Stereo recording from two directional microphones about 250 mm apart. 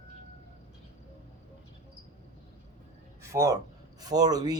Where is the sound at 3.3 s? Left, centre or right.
Centre.